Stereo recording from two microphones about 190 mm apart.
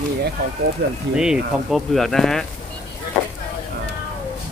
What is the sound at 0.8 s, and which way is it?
Speech, 60° right (ahead or behind).